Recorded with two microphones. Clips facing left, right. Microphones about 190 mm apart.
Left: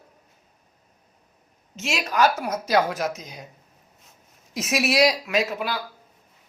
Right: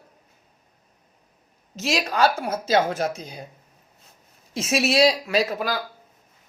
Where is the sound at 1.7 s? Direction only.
35° right (ahead or behind).